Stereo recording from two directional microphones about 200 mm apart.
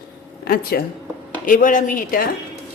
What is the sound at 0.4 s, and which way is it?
A woman's voice, 50° left (ahead or behind).